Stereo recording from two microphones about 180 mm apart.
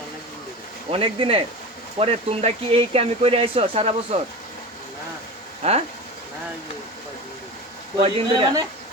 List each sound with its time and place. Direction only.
0.9 s speech: 30° right (ahead or behind)
5.6 s speech: 35° right (ahead or behind)
7.9 s a man's voice: 30° right (ahead or behind)